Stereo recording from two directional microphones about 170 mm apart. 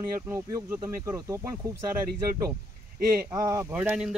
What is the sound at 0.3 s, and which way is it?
Speech, 15° right (ahead or behind).